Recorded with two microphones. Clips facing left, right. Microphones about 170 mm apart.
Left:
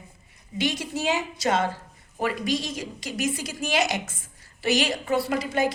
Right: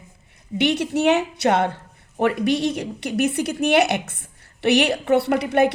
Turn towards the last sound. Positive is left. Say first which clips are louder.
# right 6 dB
turn(degrees=-65)  # may be behind; listen again after turning